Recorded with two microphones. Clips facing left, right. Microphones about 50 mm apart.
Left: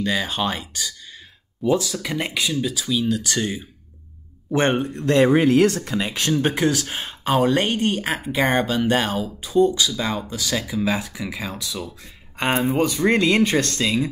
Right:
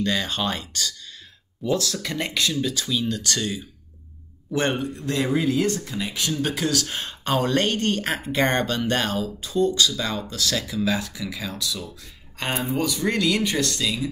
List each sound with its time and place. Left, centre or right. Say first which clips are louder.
0.0 s speech: left 2 dB; centre
4.5 s speech: left 4 dB; left
6.3 s speech: left 5 dB; left